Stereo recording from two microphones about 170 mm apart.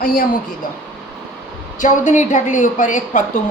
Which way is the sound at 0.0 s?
55° left (ahead or behind).